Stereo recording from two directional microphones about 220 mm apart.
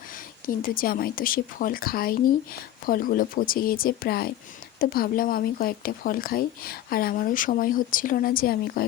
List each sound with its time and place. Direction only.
0.1 s speech: 40° left (ahead or behind)